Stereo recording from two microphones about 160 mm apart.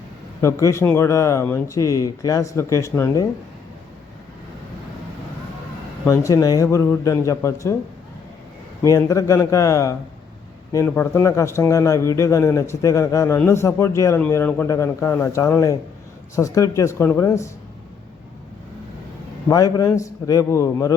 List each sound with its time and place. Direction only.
0.4 s a man's voice: 15° left (ahead or behind)
6.1 s a man's voice: 20° left (ahead or behind)
8.8 s a man's voice: 20° left (ahead or behind)
19.5 s a man's voice: 25° left (ahead or behind)